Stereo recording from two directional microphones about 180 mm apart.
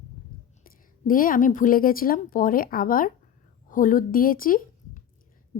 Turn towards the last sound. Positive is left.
turn(degrees=50)  # may be behind; listen again after turning